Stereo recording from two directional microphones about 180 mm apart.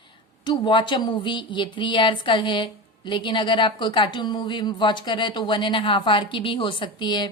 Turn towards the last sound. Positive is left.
turn(degrees=25)  # may be behind; listen again after turning